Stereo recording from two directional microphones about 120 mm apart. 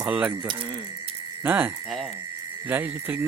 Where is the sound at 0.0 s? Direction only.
10° right (ahead or behind).